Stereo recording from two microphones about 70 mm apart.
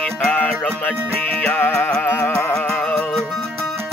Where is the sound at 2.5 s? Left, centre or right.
Centre.